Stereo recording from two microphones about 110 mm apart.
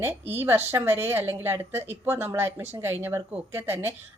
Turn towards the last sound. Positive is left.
turn(degrees=-20)  # may be behind; listen again after turning